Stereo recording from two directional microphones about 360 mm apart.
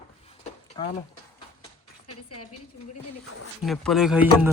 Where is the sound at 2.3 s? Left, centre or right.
Left.